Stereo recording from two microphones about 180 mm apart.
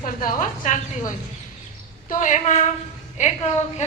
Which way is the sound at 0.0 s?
50° left (ahead or behind).